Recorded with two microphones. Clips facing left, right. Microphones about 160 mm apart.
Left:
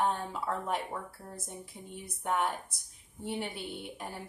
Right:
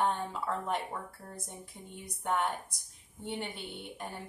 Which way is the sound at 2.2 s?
Centre (ahead or behind).